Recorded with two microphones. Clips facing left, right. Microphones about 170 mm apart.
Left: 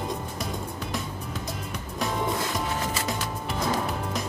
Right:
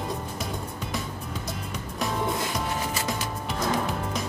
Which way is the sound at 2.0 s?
Centre (ahead or behind).